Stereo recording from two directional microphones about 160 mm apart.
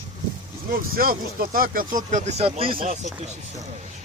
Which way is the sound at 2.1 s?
50° right (ahead or behind).